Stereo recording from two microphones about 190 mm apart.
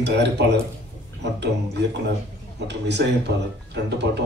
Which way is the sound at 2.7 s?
65° right (ahead or behind).